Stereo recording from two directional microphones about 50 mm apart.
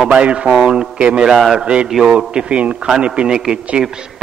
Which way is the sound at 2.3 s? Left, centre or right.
Right.